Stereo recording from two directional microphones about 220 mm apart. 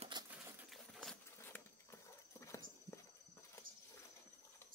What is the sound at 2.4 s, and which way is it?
Horse, 15° left (ahead or behind).